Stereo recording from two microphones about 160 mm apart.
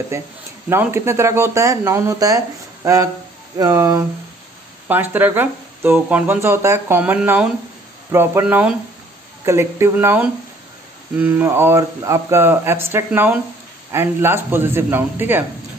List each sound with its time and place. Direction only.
0.1 s speech: 15° right (ahead or behind)